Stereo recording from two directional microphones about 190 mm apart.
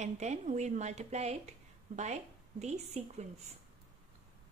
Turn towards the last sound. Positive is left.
turn(degrees=-35)  # may be behind; listen again after turning